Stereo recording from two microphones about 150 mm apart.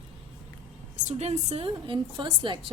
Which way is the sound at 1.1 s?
50° right (ahead or behind).